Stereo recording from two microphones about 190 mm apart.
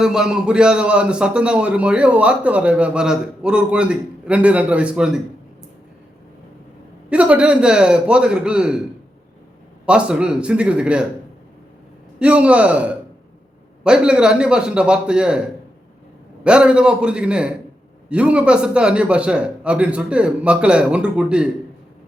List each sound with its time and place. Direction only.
0.0 s a man's voice: 5° right (ahead or behind)
7.1 s a man's voice: 5° right (ahead or behind)
9.8 s a man's voice: 5° right (ahead or behind)
12.2 s a man's voice: 5° right (ahead or behind)
16.4 s a man's voice: 5° right (ahead or behind)